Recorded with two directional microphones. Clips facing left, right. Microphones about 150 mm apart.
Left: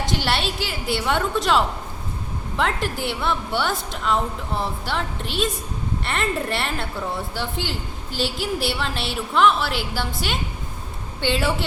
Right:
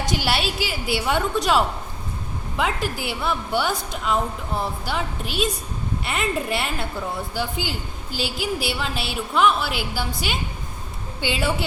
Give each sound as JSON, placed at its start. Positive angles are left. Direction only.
{"t": 0.2, "sound": "a woman's voice", "side_deg": -5}